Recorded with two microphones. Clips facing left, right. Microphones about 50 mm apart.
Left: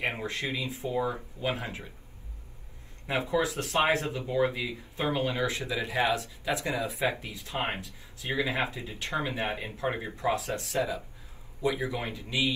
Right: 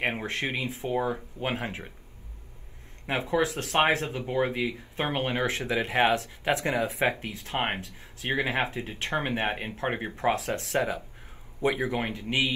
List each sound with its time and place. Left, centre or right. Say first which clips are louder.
0.0 s speech: right 2 dB; right
3.1 s speech: right 2 dB; right